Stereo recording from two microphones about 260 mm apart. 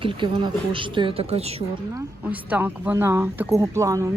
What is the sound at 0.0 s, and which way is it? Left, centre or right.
A woman's voice, centre.